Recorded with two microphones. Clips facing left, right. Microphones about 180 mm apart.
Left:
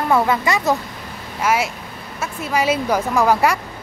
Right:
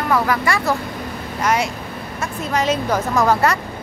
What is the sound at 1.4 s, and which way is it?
Speech, 5° left (ahead or behind).